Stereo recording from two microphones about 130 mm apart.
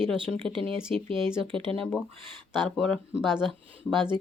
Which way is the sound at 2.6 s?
5° left (ahead or behind).